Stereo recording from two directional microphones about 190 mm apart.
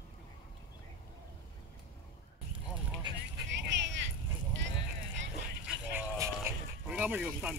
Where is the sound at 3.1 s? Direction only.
25° right (ahead or behind).